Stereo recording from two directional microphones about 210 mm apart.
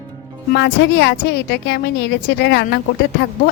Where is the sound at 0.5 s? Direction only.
55° left (ahead or behind).